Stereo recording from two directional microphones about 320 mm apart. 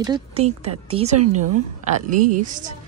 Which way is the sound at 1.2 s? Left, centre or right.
Right.